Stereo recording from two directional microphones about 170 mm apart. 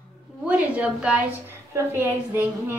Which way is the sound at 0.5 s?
5° right (ahead or behind).